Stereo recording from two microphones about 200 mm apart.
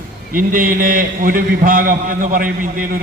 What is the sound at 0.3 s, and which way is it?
A man's voice, 45° right (ahead or behind).